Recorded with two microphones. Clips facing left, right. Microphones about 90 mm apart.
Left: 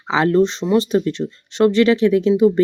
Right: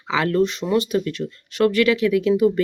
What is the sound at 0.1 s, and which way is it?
Speech, 25° left (ahead or behind).